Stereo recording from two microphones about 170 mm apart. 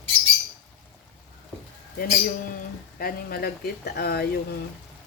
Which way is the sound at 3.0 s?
60° left (ahead or behind).